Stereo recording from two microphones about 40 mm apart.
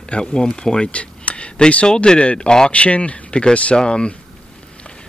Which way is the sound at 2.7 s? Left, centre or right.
Left.